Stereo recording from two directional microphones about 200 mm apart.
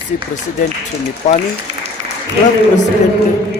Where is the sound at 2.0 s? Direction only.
35° right (ahead or behind).